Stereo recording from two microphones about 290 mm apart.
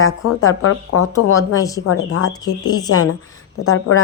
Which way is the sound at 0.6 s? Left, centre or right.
Left.